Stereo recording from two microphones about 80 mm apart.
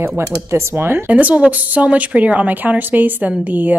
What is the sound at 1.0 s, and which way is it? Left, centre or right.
A woman's voice, centre.